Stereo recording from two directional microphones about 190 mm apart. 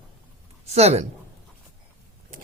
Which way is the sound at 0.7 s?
35° right (ahead or behind).